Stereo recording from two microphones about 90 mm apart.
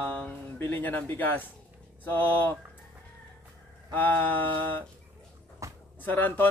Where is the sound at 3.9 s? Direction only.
20° left (ahead or behind).